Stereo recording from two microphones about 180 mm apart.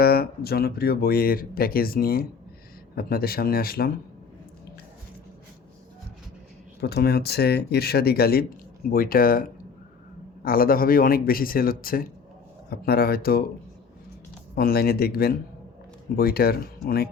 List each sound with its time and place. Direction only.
0.0 s speech: 60° left (ahead or behind)
6.8 s a man's voice: 65° left (ahead or behind)
14.5 s speech: 55° left (ahead or behind)